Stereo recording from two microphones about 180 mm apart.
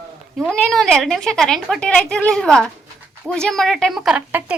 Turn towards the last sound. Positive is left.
turn(degrees=-5)  # may be behind; listen again after turning